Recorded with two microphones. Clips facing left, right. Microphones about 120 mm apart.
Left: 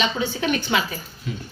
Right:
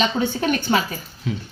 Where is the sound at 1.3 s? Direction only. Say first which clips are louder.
Right 5 dB; 90° right.